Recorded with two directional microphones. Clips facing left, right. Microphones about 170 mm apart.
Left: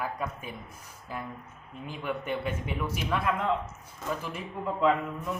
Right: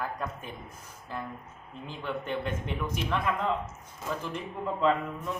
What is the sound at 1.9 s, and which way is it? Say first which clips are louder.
A man's voice: left 1 dB; 10° left (ahead or behind).